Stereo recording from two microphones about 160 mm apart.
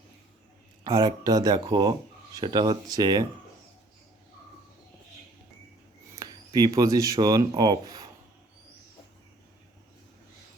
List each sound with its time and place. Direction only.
0.9 s speech: 25° right (ahead or behind)
6.1 s speech: 25° right (ahead or behind)